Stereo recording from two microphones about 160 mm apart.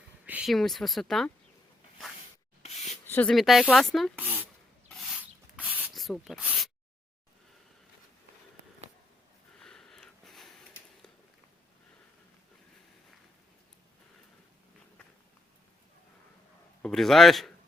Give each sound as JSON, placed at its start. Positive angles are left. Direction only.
{"t": 0.3, "sound": "speech", "side_deg": -5}
{"t": 2.6, "sound": "a sound", "side_deg": 45}
{"t": 3.1, "sound": "speech", "side_deg": 10}
{"t": 3.3, "sound": "speech", "side_deg": 0}
{"t": 4.2, "sound": "a sound", "side_deg": -10}
{"t": 4.9, "sound": "a sound", "side_deg": 0}
{"t": 5.9, "sound": "speech", "side_deg": 0}
{"t": 9.6, "sound": "sniff", "side_deg": 5}
{"t": 16.8, "sound": "speech", "side_deg": 0}